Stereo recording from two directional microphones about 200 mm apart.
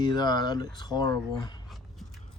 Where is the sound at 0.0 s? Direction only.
20° left (ahead or behind).